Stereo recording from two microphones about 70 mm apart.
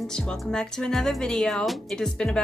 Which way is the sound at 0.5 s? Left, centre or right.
Centre.